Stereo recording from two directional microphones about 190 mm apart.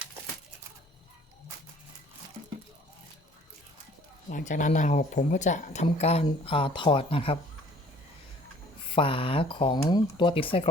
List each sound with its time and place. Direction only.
4.3 s speech: 45° left (ahead or behind)
8.9 s speech: 30° left (ahead or behind)